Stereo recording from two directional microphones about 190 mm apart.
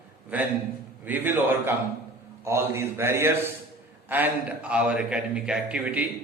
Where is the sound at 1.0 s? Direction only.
10° right (ahead or behind).